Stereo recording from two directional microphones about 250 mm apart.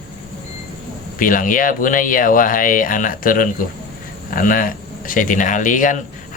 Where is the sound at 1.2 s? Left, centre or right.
Left.